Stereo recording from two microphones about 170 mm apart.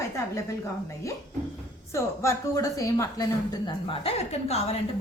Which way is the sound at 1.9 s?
15° left (ahead or behind).